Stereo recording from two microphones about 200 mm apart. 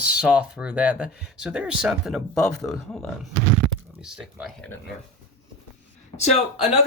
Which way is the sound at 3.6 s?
5° right (ahead or behind).